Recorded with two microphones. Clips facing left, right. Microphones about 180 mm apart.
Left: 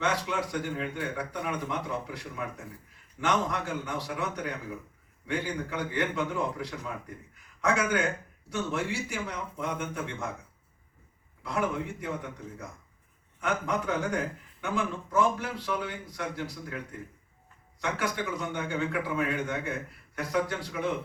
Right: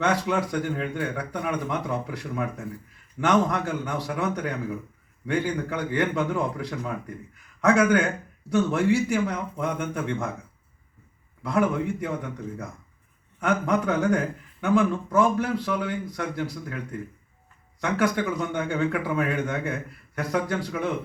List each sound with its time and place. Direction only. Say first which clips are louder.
0.0 s a man's voice: right 6 dB; 50° right (ahead or behind)
11.4 s a man's voice: right 7 dB; 50° right (ahead or behind)
13.4 s a man's voice: right 6 dB; 55° right (ahead or behind)
17.7 s a man's voice: right 7 dB; 50° right (ahead or behind)